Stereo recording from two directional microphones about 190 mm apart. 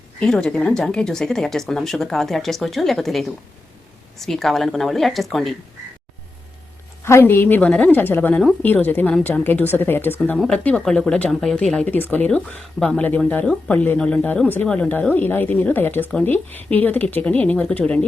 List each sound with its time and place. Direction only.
0.2 s speech: 5° left (ahead or behind)
7.0 s a woman's voice: 15° left (ahead or behind)